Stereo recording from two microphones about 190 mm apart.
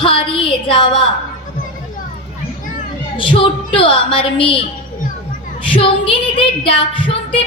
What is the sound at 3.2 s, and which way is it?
Female singing, 25° left (ahead or behind).